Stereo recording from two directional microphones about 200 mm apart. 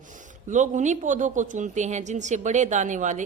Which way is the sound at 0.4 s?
40° right (ahead or behind).